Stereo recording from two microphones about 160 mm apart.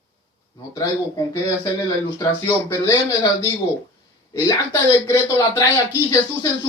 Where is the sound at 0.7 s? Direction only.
20° left (ahead or behind).